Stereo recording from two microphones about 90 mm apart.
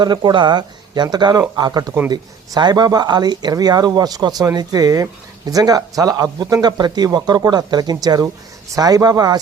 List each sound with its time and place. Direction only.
0.0 s speech: 55° right (ahead or behind)